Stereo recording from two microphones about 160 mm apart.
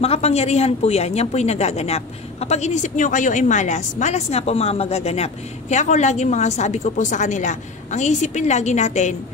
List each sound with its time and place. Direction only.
0.0 s a woman's voice: 40° left (ahead or behind)